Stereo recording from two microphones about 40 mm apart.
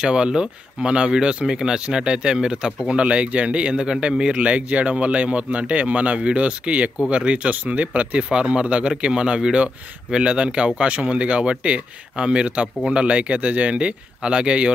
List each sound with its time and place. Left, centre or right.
0.0 s speech: right
4.4 s speech: right
8.2 s speech: right